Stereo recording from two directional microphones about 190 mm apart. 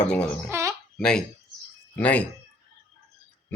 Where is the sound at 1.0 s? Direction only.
5° left (ahead or behind).